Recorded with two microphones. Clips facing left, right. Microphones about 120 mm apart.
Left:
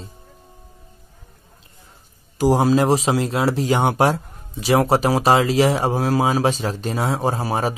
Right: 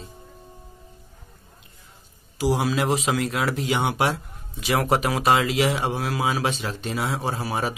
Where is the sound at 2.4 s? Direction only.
40° left (ahead or behind).